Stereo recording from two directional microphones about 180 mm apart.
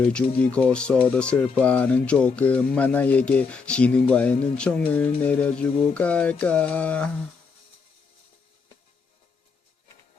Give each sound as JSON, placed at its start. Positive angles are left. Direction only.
{"t": 0.0, "sound": "speech", "side_deg": 5}